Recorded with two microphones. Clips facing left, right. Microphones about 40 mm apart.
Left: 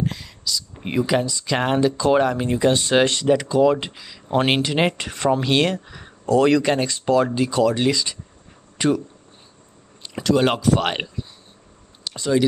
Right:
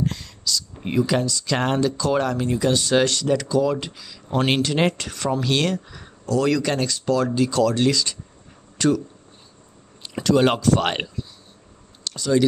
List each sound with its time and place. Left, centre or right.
0.0 s speech: centre
6.2 s speech: left; by 8.2 s centre
8.7 s a sound: left
10.0 s speech: centre
12.2 s speech: centre